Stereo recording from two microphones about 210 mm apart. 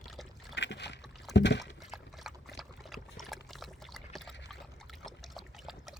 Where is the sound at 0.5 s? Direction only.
55° left (ahead or behind).